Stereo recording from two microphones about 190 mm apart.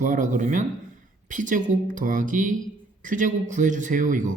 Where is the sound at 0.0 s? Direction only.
40° right (ahead or behind).